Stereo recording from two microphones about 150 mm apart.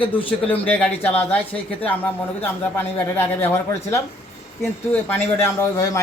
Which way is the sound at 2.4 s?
15° left (ahead or behind).